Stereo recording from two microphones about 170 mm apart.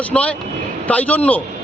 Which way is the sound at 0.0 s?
10° left (ahead or behind).